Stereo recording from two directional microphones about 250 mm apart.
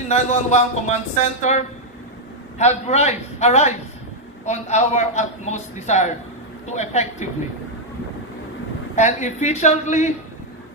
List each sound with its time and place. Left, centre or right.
0.1 s a man's voice: left
2.6 s a man's voice: left
8.9 s a man's voice: left